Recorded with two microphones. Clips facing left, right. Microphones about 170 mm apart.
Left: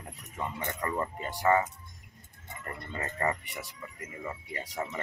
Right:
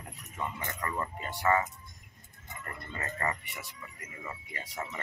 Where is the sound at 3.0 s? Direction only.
30° left (ahead or behind).